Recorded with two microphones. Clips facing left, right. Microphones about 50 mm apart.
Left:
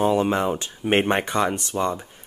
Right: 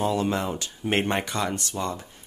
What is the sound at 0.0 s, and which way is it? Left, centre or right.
Speech, left.